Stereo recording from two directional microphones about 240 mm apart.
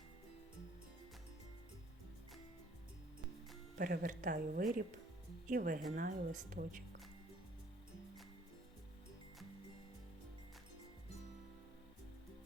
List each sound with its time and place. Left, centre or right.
3.8 s speech: right